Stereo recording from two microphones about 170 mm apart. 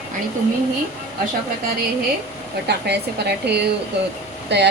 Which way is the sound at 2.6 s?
75° right (ahead or behind).